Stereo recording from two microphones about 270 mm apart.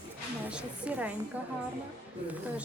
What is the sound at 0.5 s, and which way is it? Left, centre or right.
Speech, centre.